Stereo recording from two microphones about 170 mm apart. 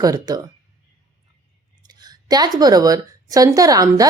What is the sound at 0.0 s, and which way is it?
Speech, 20° right (ahead or behind).